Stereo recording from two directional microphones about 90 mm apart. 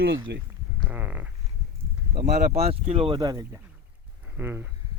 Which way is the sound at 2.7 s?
85° right.